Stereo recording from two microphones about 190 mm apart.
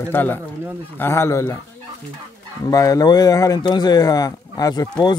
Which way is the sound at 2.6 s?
20° left (ahead or behind).